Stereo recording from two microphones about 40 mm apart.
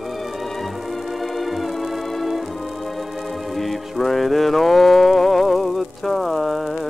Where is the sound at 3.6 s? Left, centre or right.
Centre.